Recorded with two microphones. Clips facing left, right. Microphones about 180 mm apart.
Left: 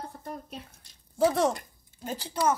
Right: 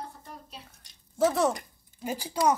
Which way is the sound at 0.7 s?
Centre (ahead or behind).